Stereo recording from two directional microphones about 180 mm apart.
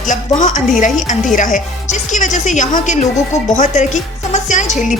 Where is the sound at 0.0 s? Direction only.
45° left (ahead or behind).